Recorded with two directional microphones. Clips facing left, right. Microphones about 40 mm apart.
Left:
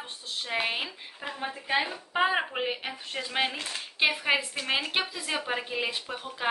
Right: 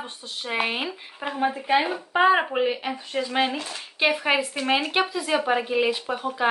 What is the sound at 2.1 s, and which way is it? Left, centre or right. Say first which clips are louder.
Speech: right 7 dB; centre.